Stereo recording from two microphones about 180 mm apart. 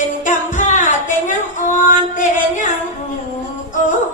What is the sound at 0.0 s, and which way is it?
Music, 45° left (ahead or behind).